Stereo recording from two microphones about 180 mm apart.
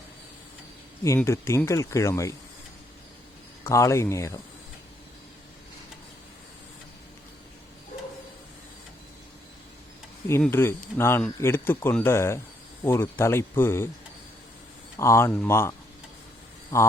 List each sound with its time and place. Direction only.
1.0 s speech: 15° left (ahead or behind)
3.6 s speech: 15° left (ahead or behind)
10.4 s speech: 15° left (ahead or behind)
14.9 s speech: 15° left (ahead or behind)